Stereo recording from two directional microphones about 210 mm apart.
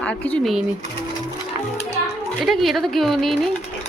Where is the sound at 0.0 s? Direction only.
5° left (ahead or behind).